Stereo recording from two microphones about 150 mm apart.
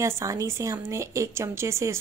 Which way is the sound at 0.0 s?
20° right (ahead or behind).